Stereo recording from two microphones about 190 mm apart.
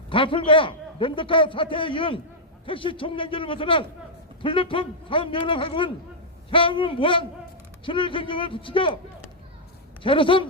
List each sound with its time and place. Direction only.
0.1 s a man's voice: 25° left (ahead or behind)
10.0 s a man's voice: 25° left (ahead or behind)